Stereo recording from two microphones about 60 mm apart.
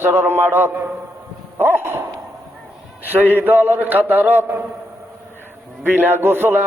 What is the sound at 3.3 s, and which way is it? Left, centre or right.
A man's voice, right.